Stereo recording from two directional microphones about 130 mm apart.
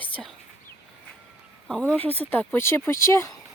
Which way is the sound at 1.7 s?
10° left (ahead or behind).